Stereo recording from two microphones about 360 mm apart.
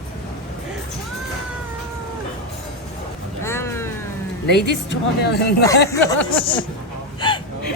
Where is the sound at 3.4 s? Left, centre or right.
Centre.